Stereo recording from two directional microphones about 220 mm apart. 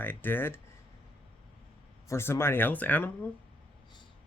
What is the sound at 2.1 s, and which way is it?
Speech, 10° left (ahead or behind).